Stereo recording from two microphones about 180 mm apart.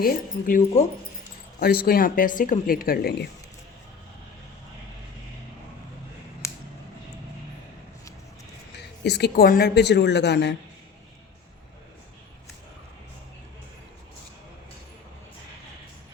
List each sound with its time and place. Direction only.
0.0 s speech: 55° left (ahead or behind)
1.5 s speech: 60° left (ahead or behind)
9.0 s a woman's voice: 65° left (ahead or behind)